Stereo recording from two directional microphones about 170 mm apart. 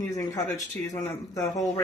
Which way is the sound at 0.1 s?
20° left (ahead or behind).